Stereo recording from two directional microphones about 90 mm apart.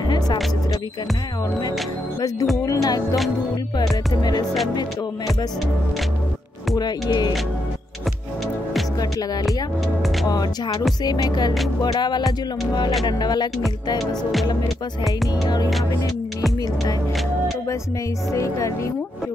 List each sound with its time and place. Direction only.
2.5 s speech: 40° left (ahead or behind)
4.2 s speech: 50° left (ahead or behind)
6.7 s speech: 50° left (ahead or behind)
10.2 s speech: 45° left (ahead or behind)
15.4 s speech: 45° left (ahead or behind)
18.3 s speech: 35° left (ahead or behind)